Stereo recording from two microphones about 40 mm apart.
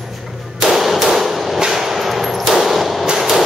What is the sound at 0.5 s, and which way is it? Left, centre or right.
Clang, centre.